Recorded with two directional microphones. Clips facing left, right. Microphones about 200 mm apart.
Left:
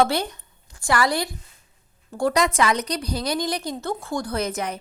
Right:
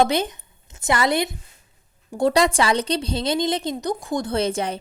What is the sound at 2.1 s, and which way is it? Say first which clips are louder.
A woman's voice: right 3 dB; 25° right (ahead or behind).